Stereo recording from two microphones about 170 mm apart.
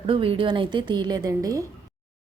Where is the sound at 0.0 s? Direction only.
30° right (ahead or behind).